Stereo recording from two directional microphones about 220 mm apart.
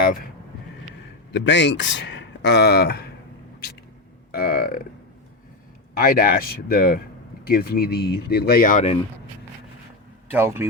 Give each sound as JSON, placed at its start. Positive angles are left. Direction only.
{"t": 0.0, "sound": "a sound", "side_deg": 40}
{"t": 1.3, "sound": "speech", "side_deg": 55}
{"t": 4.3, "sound": "speech", "side_deg": 45}
{"t": 6.0, "sound": "speech", "side_deg": 40}
{"t": 10.2, "sound": "speech", "side_deg": -10}